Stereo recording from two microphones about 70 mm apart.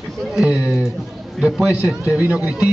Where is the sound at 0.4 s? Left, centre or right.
Centre.